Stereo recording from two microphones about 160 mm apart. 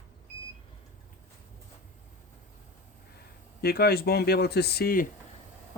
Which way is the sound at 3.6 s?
75° left (ahead or behind).